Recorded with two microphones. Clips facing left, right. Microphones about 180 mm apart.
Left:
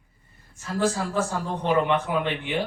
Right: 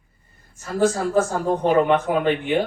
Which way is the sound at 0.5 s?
45° right (ahead or behind).